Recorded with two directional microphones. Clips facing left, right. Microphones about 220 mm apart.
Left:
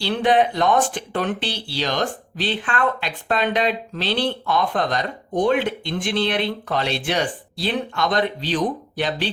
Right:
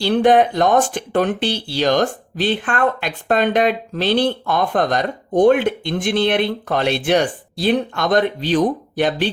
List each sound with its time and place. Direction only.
0.0 s speech: 45° right (ahead or behind)